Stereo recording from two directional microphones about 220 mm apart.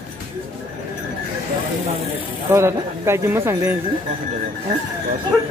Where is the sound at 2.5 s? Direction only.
10° right (ahead or behind).